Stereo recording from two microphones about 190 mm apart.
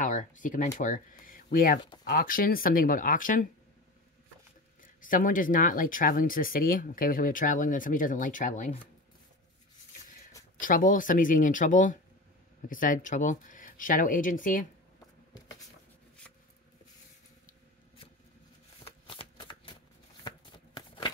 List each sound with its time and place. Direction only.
0.0 s speech: 40° left (ahead or behind)
4.8 s speech: 45° left (ahead or behind)
10.6 s speech: 45° left (ahead or behind)
18.9 s shuffling cards: 30° left (ahead or behind)
20.2 s a sound: 25° left (ahead or behind)